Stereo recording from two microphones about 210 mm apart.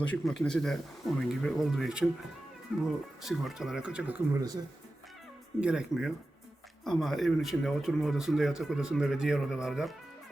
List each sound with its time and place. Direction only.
0.4 s speech: 5° left (ahead or behind)
4.4 s speech: 15° right (ahead or behind)
5.5 s speech: 5° right (ahead or behind)